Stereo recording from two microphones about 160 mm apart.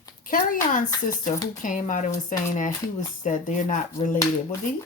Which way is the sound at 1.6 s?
55° left (ahead or behind).